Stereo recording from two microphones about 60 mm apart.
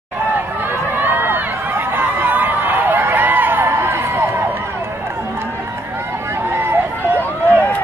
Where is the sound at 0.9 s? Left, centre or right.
Right.